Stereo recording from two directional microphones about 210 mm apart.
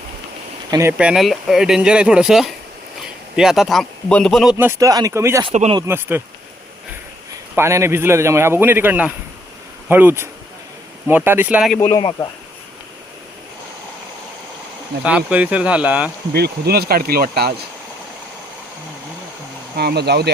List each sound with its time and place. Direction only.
0.7 s speech: 10° right (ahead or behind)
4.5 s a man's voice: 15° right (ahead or behind)
5.5 s speech: 25° right (ahead or behind)
5.8 s a man's voice: 10° right (ahead or behind)
7.5 s a man's voice: 10° right (ahead or behind)
11.8 s speech: 20° left (ahead or behind)
15.0 s speech: 5° right (ahead or behind)
16.3 s speech: 50° right (ahead or behind)
19.7 s speech: 50° right (ahead or behind)